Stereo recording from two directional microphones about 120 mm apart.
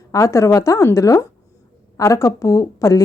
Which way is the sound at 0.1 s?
25° left (ahead or behind).